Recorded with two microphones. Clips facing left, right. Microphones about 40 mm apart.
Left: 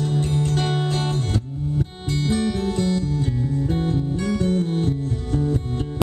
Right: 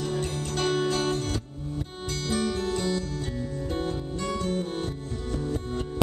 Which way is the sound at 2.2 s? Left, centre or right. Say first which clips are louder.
Left 5 dB; centre.